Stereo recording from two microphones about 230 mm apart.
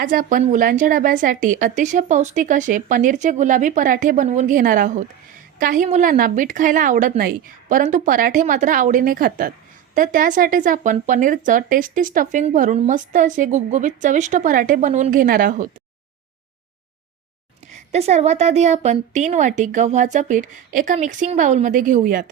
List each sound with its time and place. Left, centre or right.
0.0 s speech: right
17.9 s speech: right